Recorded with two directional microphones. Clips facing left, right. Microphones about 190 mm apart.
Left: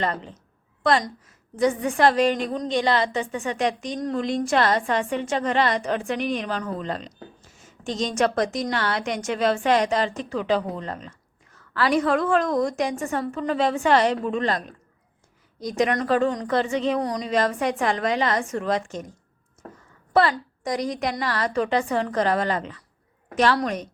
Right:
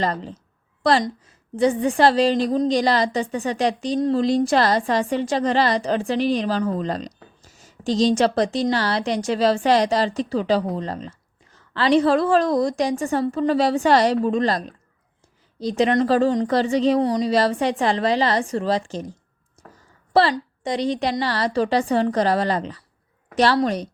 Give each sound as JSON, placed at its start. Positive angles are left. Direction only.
{"t": 0.0, "sound": "a woman's voice", "side_deg": -35}
{"t": 15.6, "sound": "a woman's voice", "side_deg": -30}
{"t": 19.6, "sound": "a sound", "side_deg": -35}
{"t": 20.1, "sound": "a woman's voice", "side_deg": -30}